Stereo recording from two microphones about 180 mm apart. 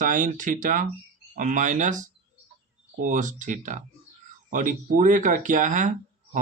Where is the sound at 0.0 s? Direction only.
45° right (ahead or behind).